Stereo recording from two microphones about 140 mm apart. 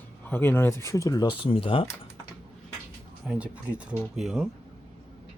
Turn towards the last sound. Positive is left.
turn(degrees=0)  # may be behind; listen again after turning